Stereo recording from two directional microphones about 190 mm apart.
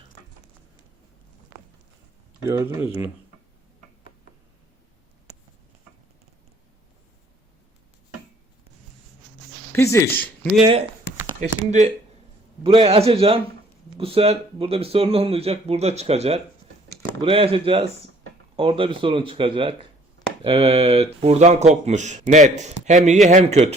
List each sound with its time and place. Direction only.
2.4 s speech: 15° right (ahead or behind)
9.7 s speech: 15° left (ahead or behind)
11.3 s speech: 40° right (ahead or behind)